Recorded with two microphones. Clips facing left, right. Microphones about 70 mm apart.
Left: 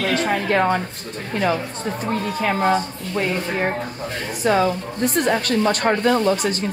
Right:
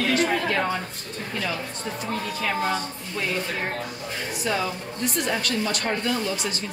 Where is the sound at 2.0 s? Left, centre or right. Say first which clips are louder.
Left 6 dB; left.